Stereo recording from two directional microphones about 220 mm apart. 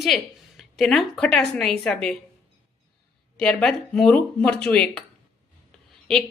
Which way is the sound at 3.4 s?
5° left (ahead or behind).